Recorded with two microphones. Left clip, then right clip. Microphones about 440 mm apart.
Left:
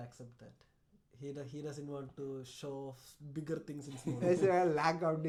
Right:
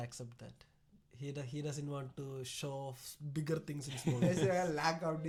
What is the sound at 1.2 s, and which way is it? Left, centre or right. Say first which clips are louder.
Speech: even; centre.